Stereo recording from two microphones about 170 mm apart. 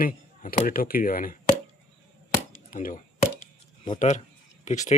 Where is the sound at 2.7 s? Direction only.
50° left (ahead or behind).